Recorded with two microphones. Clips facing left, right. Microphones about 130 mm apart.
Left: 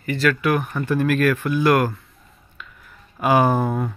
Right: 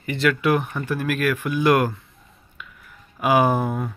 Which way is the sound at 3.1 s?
10° right (ahead or behind).